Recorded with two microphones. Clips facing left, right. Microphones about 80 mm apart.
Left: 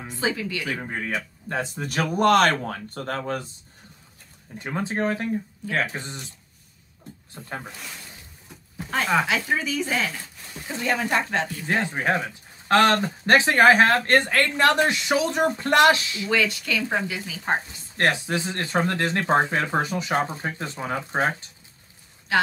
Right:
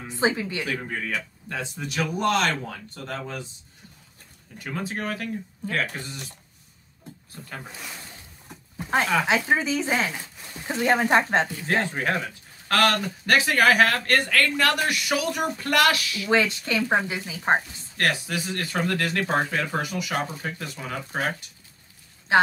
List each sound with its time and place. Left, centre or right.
0.2 s speech: right
0.7 s speech: left
4.6 s speech: left
7.4 s speech: left
9.5 s speech: right
11.6 s speech: centre
16.3 s speech: right
17.6 s speech: left